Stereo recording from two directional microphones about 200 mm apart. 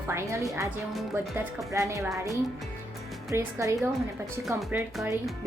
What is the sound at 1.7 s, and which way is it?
Speech, 15° right (ahead or behind).